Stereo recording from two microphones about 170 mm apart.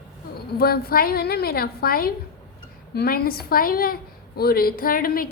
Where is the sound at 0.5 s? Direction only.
65° left (ahead or behind).